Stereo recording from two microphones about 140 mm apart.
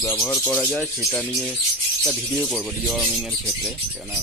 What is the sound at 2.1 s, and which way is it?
Speech, 5° right (ahead or behind).